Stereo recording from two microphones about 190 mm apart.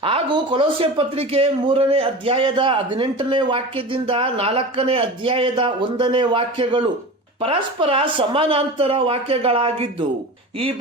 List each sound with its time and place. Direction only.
0.0 s speech: 30° right (ahead or behind)